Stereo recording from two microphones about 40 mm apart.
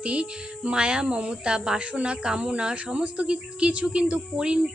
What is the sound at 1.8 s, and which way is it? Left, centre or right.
Speech, right.